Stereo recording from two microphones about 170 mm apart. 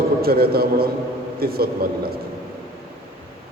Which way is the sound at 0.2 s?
65° right (ahead or behind).